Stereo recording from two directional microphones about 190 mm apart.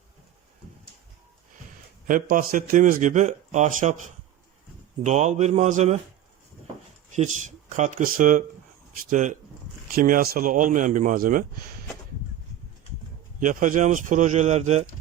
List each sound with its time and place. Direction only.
2.0 s a man's voice: 45° right (ahead or behind)
5.0 s speech: 35° right (ahead or behind)
7.2 s a man's voice: 40° right (ahead or behind)
13.4 s speech: 45° right (ahead or behind)